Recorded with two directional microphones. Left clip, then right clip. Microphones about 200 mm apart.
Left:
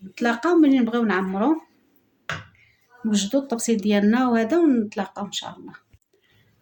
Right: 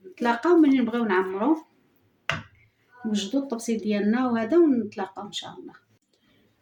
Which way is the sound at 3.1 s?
60° left (ahead or behind).